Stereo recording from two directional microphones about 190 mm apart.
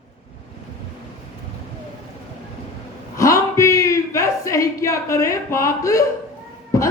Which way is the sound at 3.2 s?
15° left (ahead or behind).